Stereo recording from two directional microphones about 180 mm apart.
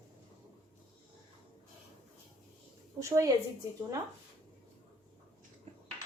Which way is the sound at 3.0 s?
15° right (ahead or behind).